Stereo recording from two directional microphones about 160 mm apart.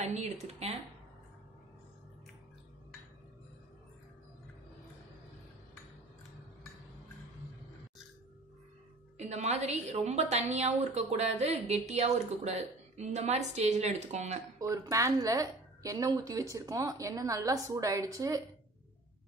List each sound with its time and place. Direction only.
0.0 s a woman's voice: 45° right (ahead or behind)
9.2 s a woman's voice: 45° right (ahead or behind)
14.6 s a woman's voice: 20° right (ahead or behind)